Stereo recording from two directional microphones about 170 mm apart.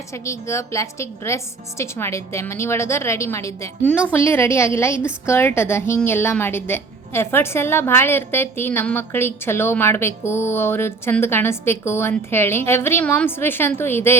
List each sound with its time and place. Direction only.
0.3 s a woman's voice: 15° left (ahead or behind)